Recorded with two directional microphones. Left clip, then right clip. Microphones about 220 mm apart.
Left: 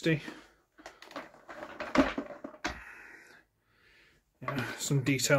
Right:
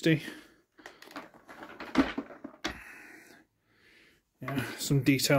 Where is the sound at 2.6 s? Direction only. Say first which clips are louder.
Even; 25° right (ahead or behind).